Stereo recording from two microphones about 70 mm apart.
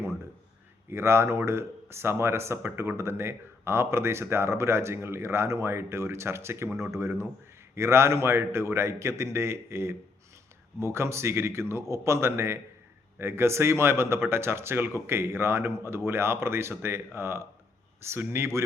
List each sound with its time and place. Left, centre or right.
0.9 s speech: right